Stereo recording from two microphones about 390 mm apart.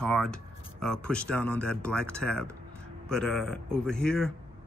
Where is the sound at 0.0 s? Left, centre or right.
Centre.